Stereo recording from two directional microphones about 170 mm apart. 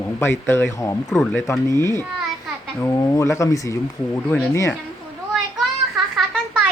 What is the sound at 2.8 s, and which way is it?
Speech, 20° left (ahead or behind).